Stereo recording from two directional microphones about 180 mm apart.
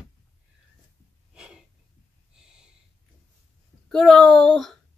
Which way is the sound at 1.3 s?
5° right (ahead or behind).